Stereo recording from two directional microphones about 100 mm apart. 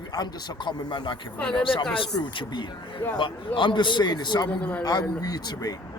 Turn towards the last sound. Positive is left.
turn(degrees=40)  # may be behind; listen again after turning